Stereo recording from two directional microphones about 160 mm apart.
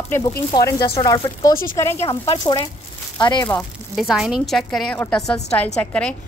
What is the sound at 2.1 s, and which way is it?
Speech, 30° left (ahead or behind).